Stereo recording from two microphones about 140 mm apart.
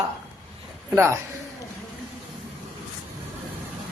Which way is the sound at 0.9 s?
20° right (ahead or behind).